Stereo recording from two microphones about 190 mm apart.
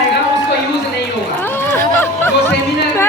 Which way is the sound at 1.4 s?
10° left (ahead or behind).